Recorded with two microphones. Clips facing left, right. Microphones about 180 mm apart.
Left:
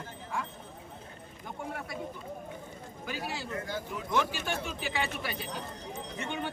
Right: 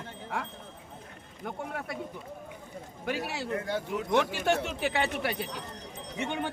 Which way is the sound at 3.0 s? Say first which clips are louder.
Right 5 dB; 65° right (ahead or behind).